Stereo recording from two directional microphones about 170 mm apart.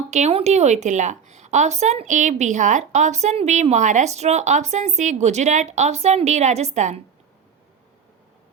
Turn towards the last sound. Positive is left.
turn(degrees=-40)  # may be behind; listen again after turning